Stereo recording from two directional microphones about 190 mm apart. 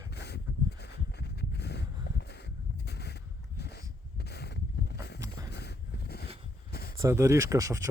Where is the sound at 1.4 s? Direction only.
60° left (ahead or behind).